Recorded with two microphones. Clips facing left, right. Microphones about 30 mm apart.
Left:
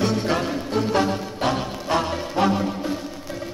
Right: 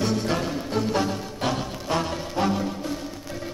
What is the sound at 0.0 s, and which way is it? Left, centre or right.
Music, centre.